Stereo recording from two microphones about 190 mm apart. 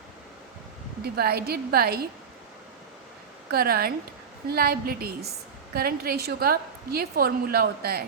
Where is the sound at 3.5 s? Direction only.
55° right (ahead or behind).